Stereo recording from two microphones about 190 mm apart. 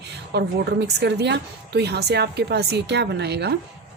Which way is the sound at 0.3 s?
60° right (ahead or behind).